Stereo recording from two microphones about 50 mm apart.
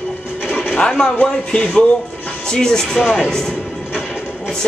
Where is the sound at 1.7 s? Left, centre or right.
Left.